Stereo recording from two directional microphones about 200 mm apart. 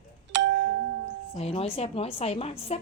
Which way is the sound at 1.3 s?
30° left (ahead or behind).